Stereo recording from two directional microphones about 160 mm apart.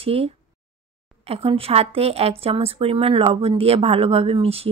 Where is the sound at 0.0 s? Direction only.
40° right (ahead or behind).